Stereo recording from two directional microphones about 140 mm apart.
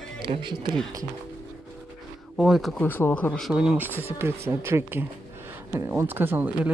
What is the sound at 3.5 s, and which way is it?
Speech, 5° right (ahead or behind).